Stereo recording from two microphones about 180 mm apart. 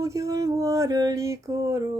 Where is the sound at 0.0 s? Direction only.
15° right (ahead or behind).